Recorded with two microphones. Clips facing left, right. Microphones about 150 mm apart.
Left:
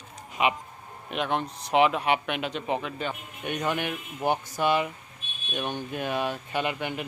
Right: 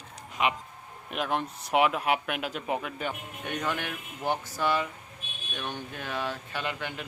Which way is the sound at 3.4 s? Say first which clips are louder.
Left 4 dB; 15° left (ahead or behind).